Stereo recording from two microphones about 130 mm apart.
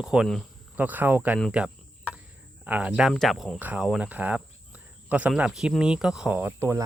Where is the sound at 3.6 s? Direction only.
10° right (ahead or behind).